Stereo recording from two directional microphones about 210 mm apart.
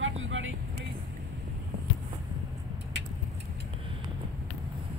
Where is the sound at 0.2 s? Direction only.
65° right (ahead or behind).